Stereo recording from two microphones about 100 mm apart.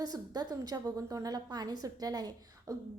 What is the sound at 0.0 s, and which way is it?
A woman's voice, 40° right (ahead or behind).